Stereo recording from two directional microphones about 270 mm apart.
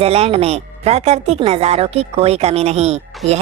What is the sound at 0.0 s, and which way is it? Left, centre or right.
A woman's voice, right.